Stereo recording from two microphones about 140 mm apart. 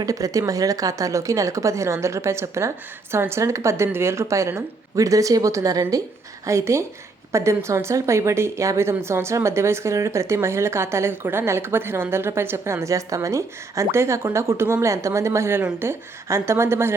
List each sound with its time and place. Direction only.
0.0 s a woman's voice: 25° right (ahead or behind)